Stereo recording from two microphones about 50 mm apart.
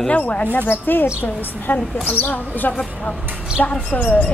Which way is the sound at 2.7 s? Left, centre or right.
Left.